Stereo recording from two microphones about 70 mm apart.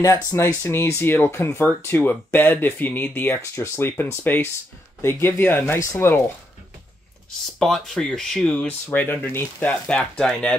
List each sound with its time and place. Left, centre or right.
0.0 s speech: left
0.7 s speech: left
7.5 s speech: centre
8.6 s speech: left